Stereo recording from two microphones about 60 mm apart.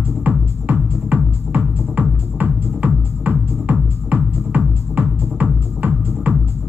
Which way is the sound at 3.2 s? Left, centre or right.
Right.